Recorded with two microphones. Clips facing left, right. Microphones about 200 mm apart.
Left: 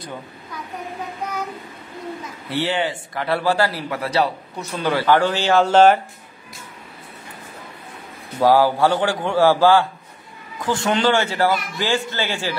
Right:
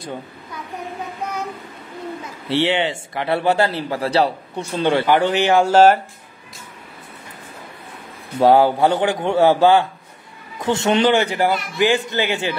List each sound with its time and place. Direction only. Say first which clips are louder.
2.5 s speech: right 3 dB; 20° right (ahead or behind)
8.4 s speech: right 2 dB; 25° right (ahead or behind)